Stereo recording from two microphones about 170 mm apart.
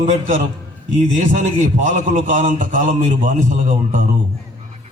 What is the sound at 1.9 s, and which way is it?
Speech, 50° right (ahead or behind).